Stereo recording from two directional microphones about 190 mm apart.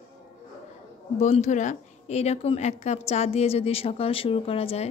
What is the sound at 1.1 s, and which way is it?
A woman's voice, 35° left (ahead or behind).